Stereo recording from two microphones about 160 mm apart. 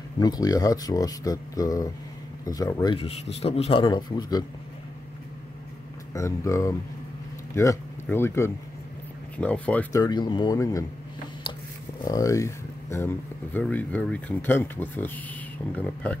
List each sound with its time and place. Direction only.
0.2 s speech: 25° left (ahead or behind)
6.1 s speech: 20° left (ahead or behind)
9.9 s speech: 25° left (ahead or behind)
12.0 s speech: 20° left (ahead or behind)